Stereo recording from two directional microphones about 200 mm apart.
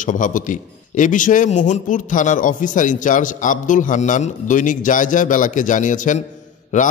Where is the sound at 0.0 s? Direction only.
40° left (ahead or behind).